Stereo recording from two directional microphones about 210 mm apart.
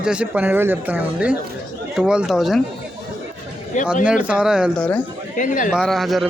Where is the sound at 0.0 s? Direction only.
5° right (ahead or behind).